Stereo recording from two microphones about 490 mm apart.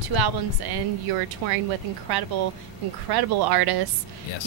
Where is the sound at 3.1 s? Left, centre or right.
Right.